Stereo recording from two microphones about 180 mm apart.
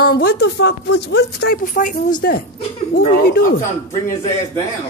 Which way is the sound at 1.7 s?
50° left (ahead or behind).